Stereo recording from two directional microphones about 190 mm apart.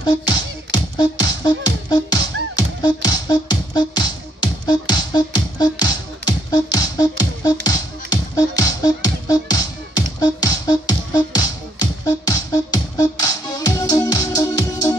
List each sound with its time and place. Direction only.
0.0 s speech: 20° left (ahead or behind)
0.9 s music: 20° left (ahead or behind)